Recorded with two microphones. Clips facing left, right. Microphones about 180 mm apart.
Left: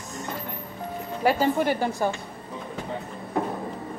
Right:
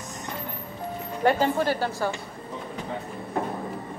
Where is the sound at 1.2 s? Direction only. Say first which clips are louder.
Even; 10° left (ahead or behind).